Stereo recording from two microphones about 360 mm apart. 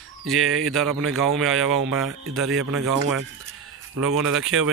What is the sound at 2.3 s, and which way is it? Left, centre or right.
Speech, right.